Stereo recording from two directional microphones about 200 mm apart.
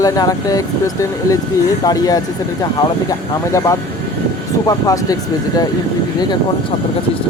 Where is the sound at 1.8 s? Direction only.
20° left (ahead or behind).